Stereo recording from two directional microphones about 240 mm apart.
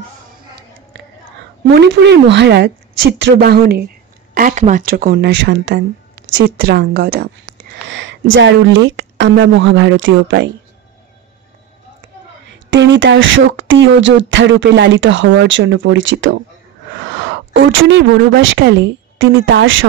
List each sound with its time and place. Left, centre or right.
1.8 s speech: right
12.4 s a woman's voice: right